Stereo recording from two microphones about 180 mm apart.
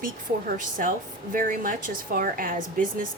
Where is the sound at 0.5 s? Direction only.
45° right (ahead or behind).